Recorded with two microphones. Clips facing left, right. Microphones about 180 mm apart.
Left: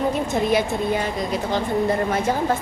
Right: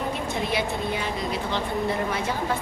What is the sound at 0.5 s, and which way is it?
A woman's voice, 45° left (ahead or behind).